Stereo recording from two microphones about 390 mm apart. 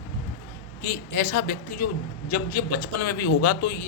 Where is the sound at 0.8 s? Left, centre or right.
Left.